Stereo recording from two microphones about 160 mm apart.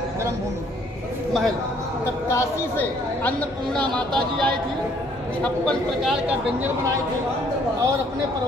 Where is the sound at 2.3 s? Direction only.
15° left (ahead or behind); by 6.3 s centre (ahead or behind).